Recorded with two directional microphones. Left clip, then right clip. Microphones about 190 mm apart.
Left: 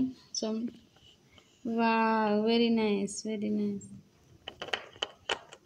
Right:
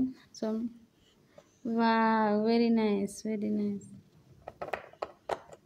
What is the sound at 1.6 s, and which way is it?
A woman's voice, 10° right (ahead or behind).